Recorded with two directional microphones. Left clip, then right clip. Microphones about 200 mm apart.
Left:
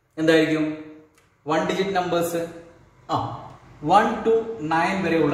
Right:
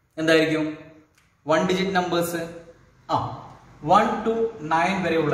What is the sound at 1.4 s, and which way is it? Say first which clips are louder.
Speech: right 1 dB; 15° right (ahead or behind).